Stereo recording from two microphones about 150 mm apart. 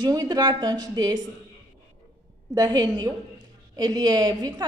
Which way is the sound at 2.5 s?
25° right (ahead or behind).